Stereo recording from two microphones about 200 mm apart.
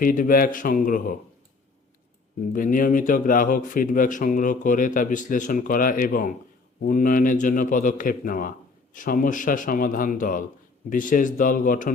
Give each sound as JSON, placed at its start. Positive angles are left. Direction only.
{"t": 0.0, "sound": "a man's voice", "side_deg": 45}
{"t": 2.5, "sound": "a man's voice", "side_deg": 40}